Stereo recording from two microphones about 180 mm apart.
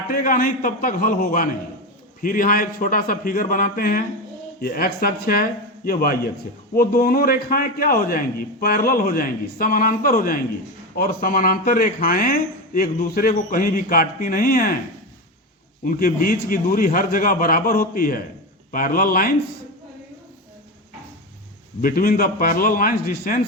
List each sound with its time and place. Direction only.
0.1 s a man's voice: 50° left (ahead or behind)
15.8 s speech: 50° left (ahead or behind)
21.8 s speech: 55° left (ahead or behind)